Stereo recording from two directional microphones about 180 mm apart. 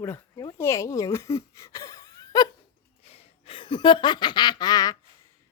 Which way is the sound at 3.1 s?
35° left (ahead or behind).